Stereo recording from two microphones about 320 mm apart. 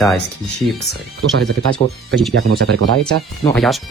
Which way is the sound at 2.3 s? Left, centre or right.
Right.